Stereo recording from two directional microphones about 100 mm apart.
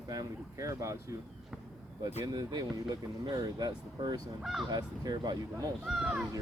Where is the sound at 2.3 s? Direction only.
40° right (ahead or behind).